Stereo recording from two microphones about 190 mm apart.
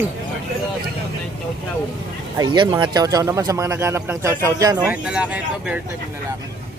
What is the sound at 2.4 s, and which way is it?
Speech, 20° right (ahead or behind).